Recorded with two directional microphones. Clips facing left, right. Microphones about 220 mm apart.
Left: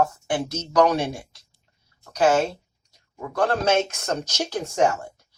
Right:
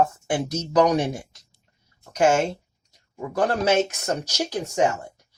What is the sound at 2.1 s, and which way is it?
Speech, 25° right (ahead or behind).